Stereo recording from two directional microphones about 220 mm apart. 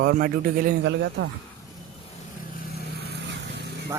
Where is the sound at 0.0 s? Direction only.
45° right (ahead or behind).